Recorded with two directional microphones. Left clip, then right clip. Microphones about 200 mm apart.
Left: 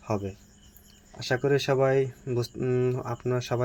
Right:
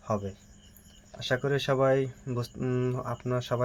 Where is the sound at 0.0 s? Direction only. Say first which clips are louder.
Left 1 dB; 15° left (ahead or behind).